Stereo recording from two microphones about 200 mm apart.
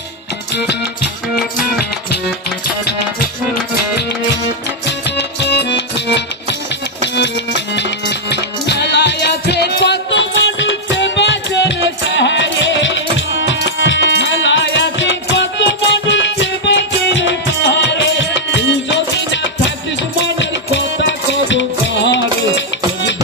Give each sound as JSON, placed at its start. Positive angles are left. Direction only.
{"t": 0.5, "sound": "music", "side_deg": 55}
{"t": 4.9, "sound": "music", "side_deg": 60}
{"t": 7.7, "sound": "music", "side_deg": 60}